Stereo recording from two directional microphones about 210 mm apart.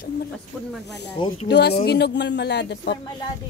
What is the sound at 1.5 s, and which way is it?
Speech, 50° left (ahead or behind).